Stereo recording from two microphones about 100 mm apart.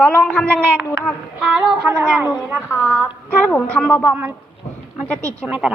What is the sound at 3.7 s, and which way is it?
Speech, 10° left (ahead or behind).